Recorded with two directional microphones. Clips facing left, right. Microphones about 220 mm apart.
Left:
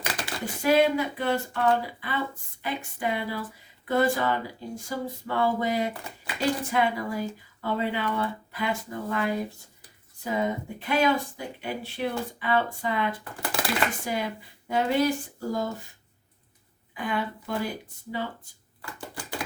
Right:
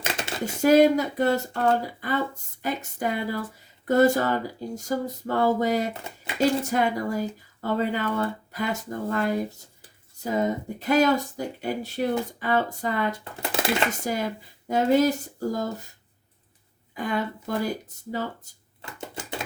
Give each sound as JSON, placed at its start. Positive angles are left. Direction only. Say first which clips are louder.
{"t": 0.0, "sound": "a sound", "louder": "right 3 dB", "side_deg": -25}
{"t": 0.6, "sound": "speech", "louder": "right 5 dB", "side_deg": -45}
{"t": 5.9, "sound": "speech", "louder": "right 2 dB", "side_deg": -25}
{"t": 6.7, "sound": "speech", "louder": "right 2 dB", "side_deg": -45}
{"t": 13.4, "sound": "speech", "louder": "right 3 dB", "side_deg": -25}
{"t": 14.0, "sound": "speech", "louder": "right 2 dB", "side_deg": -45}
{"t": 16.9, "sound": "speech", "louder": "right 2 dB", "side_deg": -40}
{"t": 18.8, "sound": "a sound", "louder": "right 2 dB", "side_deg": -25}